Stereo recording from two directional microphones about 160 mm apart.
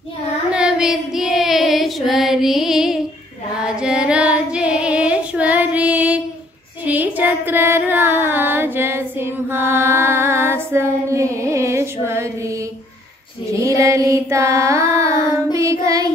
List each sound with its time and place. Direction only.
0.5 s child singing: 5° right (ahead or behind)
6.8 s a sound: 10° right (ahead or behind)
13.5 s child singing: 20° right (ahead or behind)